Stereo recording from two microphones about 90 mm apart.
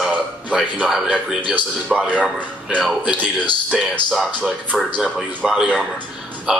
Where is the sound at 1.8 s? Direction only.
15° right (ahead or behind).